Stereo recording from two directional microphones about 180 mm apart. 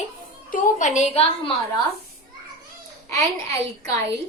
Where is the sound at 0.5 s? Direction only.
45° left (ahead or behind).